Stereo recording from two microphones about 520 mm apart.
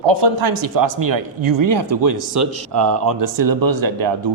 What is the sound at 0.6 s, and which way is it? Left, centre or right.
Speech, right.